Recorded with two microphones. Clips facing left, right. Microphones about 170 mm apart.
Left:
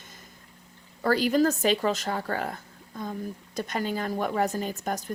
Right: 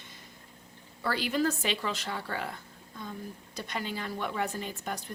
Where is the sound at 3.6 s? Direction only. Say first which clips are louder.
Left 7 dB; 45° left (ahead or behind).